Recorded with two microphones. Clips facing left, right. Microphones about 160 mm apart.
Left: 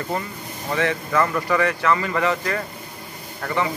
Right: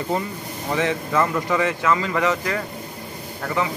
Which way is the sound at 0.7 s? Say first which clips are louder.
Even; 15° right (ahead or behind).